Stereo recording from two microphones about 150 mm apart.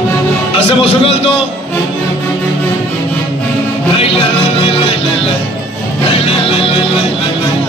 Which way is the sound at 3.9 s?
40° left (ahead or behind).